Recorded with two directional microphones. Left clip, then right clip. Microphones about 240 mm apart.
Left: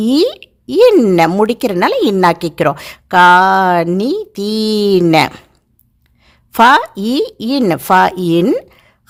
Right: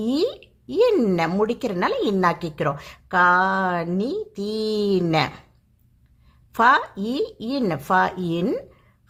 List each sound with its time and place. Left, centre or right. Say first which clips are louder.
0.0 s speech: left 10 dB; left